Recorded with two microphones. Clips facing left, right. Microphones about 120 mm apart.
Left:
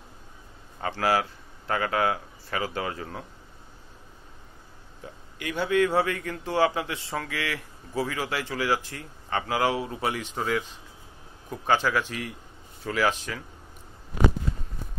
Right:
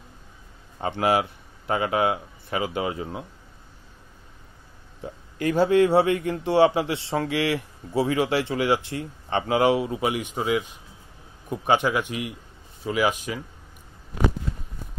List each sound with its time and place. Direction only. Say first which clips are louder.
0.7 s a man's voice: right 3 dB; 20° right (ahead or behind)
5.0 s a man's voice: right 9 dB; 40° right (ahead or behind); by 13.4 s 15° right (ahead or behind)